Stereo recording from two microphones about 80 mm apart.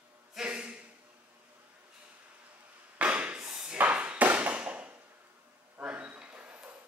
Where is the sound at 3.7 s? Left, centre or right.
Centre.